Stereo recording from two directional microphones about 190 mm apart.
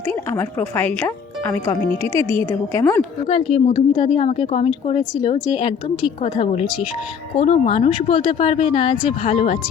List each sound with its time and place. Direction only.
0.3 s a woman's voice: 10° left (ahead or behind)
3.2 s speech: 30° left (ahead or behind)